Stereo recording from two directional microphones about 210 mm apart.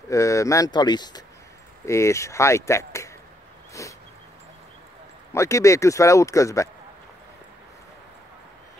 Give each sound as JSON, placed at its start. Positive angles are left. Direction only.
{"t": 0.1, "sound": "speech", "side_deg": 15}
{"t": 3.8, "sound": "dog", "side_deg": 15}
{"t": 5.3, "sound": "speech", "side_deg": 15}